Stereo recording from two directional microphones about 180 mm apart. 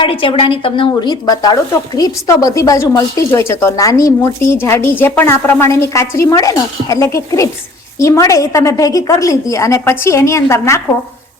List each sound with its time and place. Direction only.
0.0 s speech: 30° left (ahead or behind)